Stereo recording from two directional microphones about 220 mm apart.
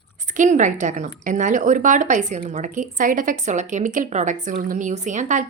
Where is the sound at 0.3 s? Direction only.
35° right (ahead or behind).